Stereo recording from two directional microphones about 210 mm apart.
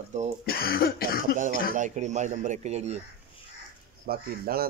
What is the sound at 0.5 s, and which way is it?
Speech, 45° left (ahead or behind).